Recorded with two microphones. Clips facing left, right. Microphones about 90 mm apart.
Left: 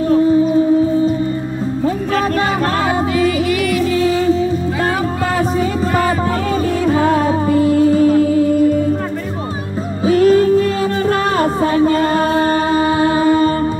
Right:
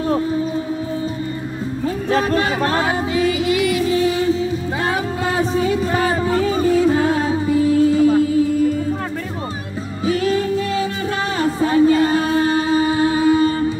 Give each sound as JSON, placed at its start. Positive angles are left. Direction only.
{"t": 3.4, "sound": "music", "side_deg": -20}
{"t": 6.3, "sound": "music", "side_deg": 60}
{"t": 10.0, "sound": "music", "side_deg": 45}